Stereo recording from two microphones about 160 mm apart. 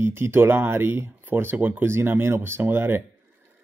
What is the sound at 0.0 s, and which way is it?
Speech, 15° right (ahead or behind).